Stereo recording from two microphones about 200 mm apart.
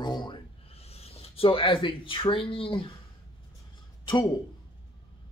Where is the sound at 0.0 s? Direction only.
20° left (ahead or behind).